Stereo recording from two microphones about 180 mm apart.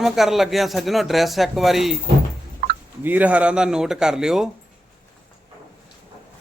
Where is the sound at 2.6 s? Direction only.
55° right (ahead or behind).